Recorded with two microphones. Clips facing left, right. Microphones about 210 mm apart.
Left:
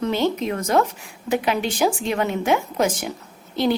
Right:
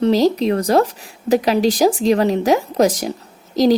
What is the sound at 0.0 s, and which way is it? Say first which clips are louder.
A woman's voice: right 7 dB; 35° right (ahead or behind).